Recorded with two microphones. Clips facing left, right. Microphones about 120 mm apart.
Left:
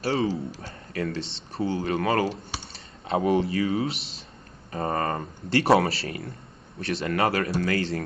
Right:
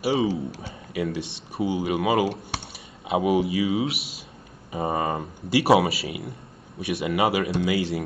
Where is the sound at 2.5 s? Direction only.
60° right (ahead or behind).